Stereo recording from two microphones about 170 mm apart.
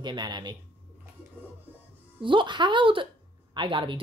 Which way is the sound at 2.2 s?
30° right (ahead or behind).